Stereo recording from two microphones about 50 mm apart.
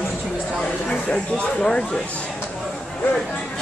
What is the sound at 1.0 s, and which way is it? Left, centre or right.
Speech, centre.